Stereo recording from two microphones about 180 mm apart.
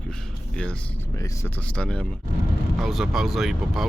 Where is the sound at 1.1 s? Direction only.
15° left (ahead or behind); by 3.8 s centre (ahead or behind).